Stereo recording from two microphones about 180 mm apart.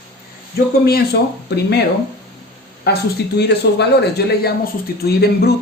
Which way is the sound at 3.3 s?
70° left (ahead or behind).